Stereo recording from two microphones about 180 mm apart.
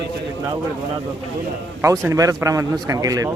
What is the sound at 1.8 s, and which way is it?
Speech, 15° right (ahead or behind).